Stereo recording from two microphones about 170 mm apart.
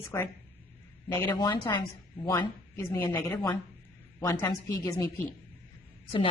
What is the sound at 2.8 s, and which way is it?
Speech, 15° left (ahead or behind).